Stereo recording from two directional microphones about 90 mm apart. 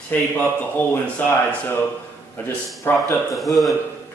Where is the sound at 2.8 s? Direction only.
30° left (ahead or behind).